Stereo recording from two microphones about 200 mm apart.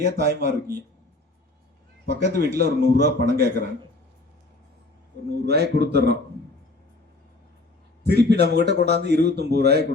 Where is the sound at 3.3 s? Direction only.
55° right (ahead or behind).